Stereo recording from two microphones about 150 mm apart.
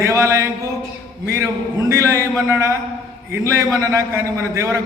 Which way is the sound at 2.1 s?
15° right (ahead or behind).